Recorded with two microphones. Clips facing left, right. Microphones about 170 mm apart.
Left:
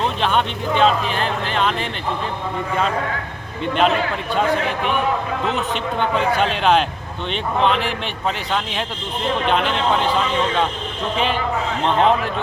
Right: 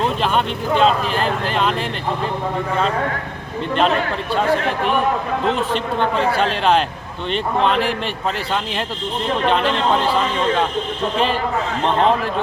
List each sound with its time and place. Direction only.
0.0 s speech: 5° right (ahead or behind)
5.5 s a man's voice: 35° right (ahead or behind)
6.4 s speech: centre (ahead or behind)
9.5 s speech: centre (ahead or behind)